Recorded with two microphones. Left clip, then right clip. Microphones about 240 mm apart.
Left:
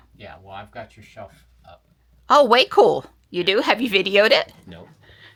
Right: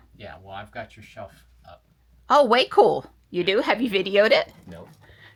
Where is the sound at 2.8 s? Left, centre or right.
Left.